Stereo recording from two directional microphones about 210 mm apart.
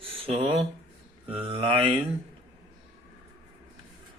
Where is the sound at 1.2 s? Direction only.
25° right (ahead or behind).